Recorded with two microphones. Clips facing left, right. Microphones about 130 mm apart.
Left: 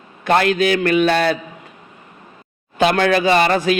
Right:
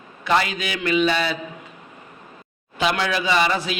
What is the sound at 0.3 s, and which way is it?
A man's voice, 55° left (ahead or behind).